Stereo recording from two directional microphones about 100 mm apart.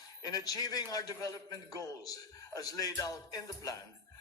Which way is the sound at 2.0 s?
40° left (ahead or behind).